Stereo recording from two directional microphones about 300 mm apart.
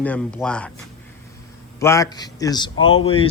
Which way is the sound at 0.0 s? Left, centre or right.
Centre.